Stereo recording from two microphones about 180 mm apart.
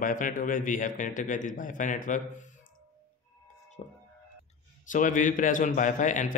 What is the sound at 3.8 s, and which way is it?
A man's voice, 40° left (ahead or behind).